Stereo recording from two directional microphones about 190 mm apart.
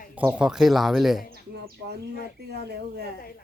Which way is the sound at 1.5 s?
60° right (ahead or behind).